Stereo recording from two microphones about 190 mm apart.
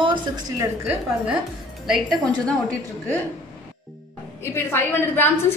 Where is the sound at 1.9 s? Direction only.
Centre (ahead or behind).